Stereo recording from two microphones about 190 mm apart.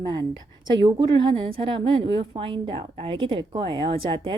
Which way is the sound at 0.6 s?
25° right (ahead or behind).